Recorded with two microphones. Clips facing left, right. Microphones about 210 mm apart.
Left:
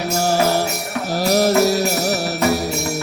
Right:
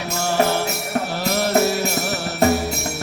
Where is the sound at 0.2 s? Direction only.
40° left (ahead or behind).